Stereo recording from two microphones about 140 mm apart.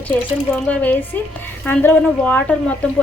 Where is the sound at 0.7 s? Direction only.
10° left (ahead or behind).